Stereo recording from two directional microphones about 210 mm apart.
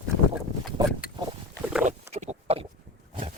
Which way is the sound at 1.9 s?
30° right (ahead or behind).